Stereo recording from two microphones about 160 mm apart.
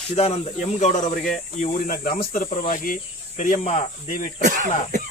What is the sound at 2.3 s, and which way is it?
Speech, 55° left (ahead or behind).